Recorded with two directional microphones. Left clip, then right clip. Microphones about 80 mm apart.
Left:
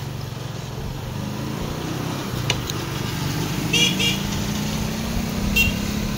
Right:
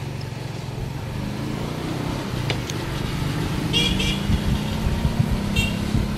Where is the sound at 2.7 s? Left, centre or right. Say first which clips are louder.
Left 1 dB; centre.